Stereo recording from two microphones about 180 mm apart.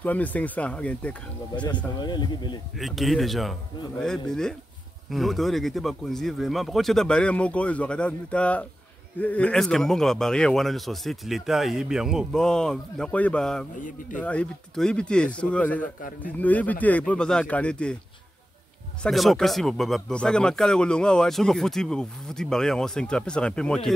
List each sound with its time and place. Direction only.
0.0 s speech: 10° left (ahead or behind)
2.0 s speech: 25° left (ahead or behind)
2.8 s speech: centre (ahead or behind)
19.0 s speech: centre (ahead or behind)